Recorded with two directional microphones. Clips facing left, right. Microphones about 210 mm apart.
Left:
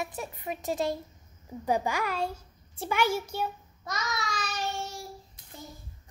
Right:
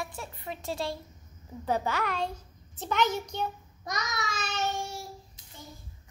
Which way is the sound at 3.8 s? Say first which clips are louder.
Even; 20° right (ahead or behind).